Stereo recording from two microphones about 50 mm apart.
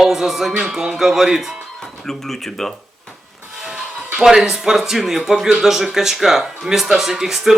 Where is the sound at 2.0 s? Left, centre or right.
Centre.